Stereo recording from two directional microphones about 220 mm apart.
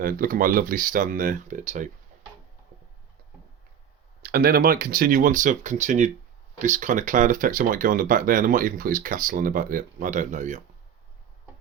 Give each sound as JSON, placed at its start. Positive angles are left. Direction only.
{"t": 0.0, "sound": "speech", "side_deg": -40}
{"t": 4.2, "sound": "speech", "side_deg": -45}